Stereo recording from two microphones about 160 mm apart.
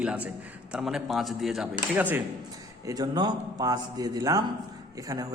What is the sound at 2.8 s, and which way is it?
A man's voice, 25° right (ahead or behind).